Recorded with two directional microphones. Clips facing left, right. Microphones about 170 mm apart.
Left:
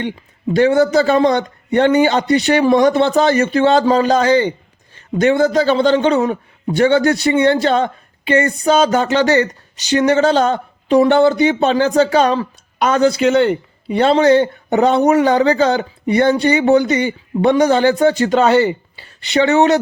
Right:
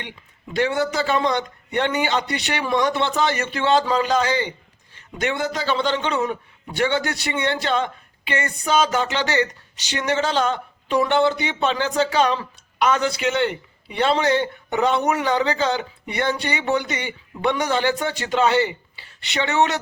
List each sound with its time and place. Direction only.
0.5 s speech: 40° left (ahead or behind)